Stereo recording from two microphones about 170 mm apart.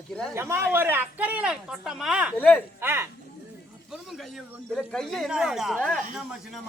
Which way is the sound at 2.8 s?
15° right (ahead or behind).